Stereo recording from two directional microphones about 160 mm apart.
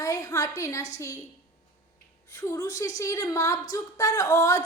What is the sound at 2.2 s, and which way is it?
A woman's voice, 20° left (ahead or behind).